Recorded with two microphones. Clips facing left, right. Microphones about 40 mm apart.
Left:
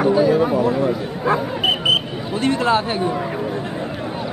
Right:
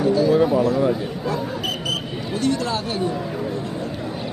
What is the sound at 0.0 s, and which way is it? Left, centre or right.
Speech, left.